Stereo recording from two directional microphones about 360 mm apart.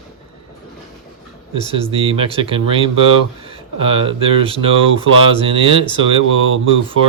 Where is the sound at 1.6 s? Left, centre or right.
Centre.